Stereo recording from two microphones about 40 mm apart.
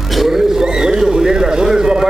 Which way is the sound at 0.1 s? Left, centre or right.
Centre.